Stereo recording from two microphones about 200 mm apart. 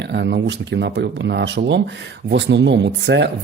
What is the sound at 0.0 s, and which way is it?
Speech, 60° right (ahead or behind).